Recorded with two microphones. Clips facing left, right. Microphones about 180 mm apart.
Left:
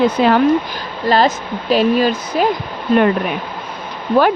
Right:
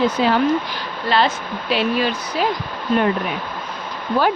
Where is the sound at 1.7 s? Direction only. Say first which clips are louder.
Left 6 dB; 40° left (ahead or behind).